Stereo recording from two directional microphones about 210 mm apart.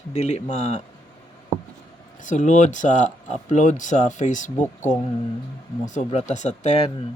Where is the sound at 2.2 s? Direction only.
35° left (ahead or behind).